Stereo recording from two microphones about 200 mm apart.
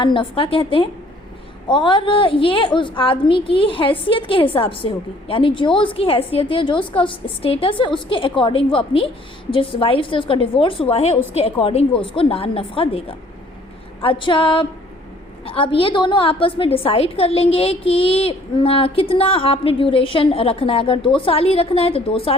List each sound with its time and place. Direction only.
0.0 s a woman's voice: 25° left (ahead or behind)